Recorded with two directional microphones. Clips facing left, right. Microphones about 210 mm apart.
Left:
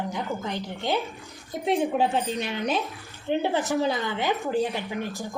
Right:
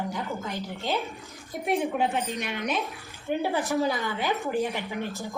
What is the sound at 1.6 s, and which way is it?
A woman's voice, 30° left (ahead or behind).